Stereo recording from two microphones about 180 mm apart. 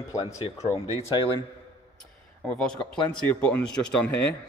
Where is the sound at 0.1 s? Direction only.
20° left (ahead or behind).